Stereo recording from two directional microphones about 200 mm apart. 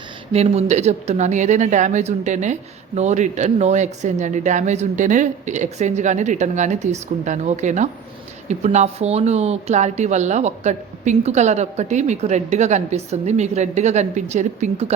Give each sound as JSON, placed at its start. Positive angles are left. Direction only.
{"t": 0.3, "sound": "speech", "side_deg": -35}